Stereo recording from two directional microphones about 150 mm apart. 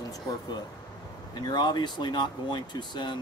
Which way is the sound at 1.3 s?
30° left (ahead or behind).